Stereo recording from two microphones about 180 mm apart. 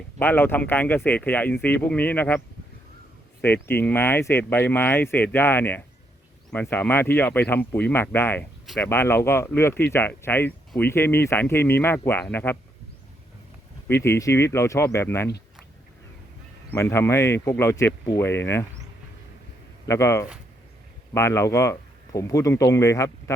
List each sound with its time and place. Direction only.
0.2 s speech: 10° left (ahead or behind)
3.4 s speech: 10° left (ahead or behind)
13.8 s speech: 10° left (ahead or behind)
16.7 s speech: 15° left (ahead or behind)
19.9 s speech: 15° left (ahead or behind)